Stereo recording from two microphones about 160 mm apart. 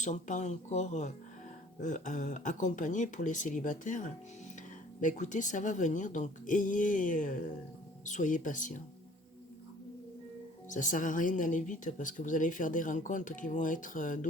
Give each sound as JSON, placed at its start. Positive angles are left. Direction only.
{"t": 0.0, "sound": "speech", "side_deg": 50}
{"t": 10.7, "sound": "speech", "side_deg": 55}